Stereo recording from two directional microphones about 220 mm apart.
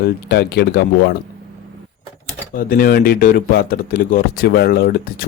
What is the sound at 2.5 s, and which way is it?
Speech, 40° left (ahead or behind).